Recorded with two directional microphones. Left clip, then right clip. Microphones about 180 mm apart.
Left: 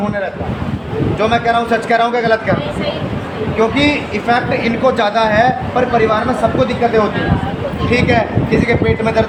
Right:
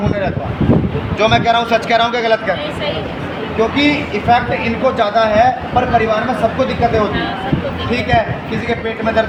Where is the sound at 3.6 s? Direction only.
30° left (ahead or behind).